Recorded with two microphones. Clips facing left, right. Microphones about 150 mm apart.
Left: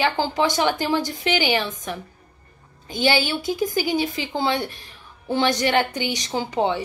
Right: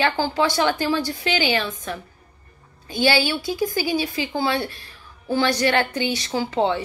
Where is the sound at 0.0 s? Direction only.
20° left (ahead or behind).